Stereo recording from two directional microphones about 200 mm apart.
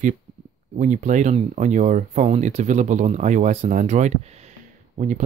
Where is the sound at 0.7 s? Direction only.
35° right (ahead or behind).